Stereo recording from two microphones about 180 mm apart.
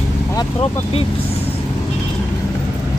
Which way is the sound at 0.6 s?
30° left (ahead or behind).